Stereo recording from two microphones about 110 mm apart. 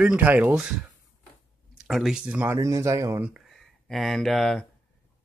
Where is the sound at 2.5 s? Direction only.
25° right (ahead or behind).